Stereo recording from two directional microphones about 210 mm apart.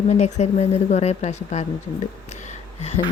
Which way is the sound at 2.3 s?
35° left (ahead or behind).